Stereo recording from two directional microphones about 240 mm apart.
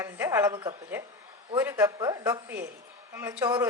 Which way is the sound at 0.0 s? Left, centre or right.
Centre.